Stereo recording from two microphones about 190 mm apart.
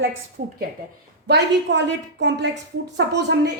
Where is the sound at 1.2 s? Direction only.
65° right (ahead or behind).